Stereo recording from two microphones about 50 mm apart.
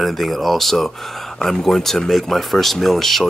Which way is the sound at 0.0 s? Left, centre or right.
Centre.